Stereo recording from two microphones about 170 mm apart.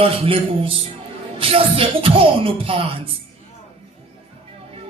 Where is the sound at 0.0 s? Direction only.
30° right (ahead or behind).